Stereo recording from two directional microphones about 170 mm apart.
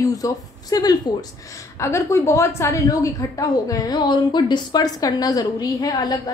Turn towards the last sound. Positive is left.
turn(degrees=20)  # may be behind; listen again after turning